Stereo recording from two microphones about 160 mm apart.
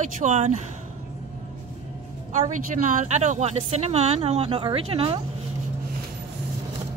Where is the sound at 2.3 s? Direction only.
50° right (ahead or behind); by 5.2 s 35° right (ahead or behind).